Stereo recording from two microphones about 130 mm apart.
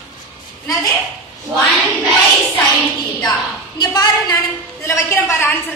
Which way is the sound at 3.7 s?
30° left (ahead or behind).